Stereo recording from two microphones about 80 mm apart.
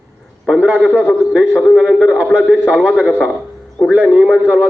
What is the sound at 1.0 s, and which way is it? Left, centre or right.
A man's voice, centre.